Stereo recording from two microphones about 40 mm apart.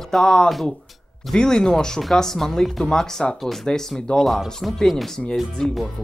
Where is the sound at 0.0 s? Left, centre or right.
Centre.